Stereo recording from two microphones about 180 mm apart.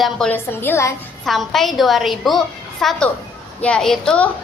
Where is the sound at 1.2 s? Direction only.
Centre (ahead or behind).